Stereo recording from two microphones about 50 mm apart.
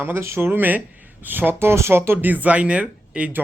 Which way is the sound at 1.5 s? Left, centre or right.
Right.